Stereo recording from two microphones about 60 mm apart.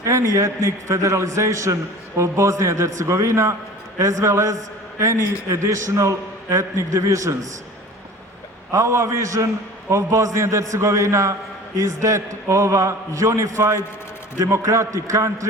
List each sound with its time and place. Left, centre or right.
0.0 s a man's voice: right
8.7 s a man's voice: right
14.3 s a man's voice: right